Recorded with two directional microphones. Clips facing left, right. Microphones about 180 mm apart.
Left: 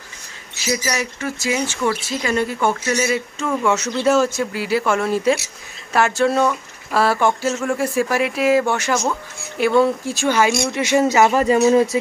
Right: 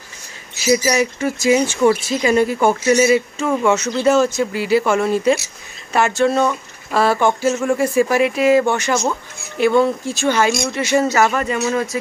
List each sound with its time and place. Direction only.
0.8 s speech: 20° right (ahead or behind)
3.6 s speech: centre (ahead or behind)
11.3 s speech: 30° left (ahead or behind)